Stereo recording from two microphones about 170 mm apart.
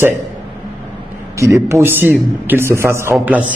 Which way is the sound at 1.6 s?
15° right (ahead or behind).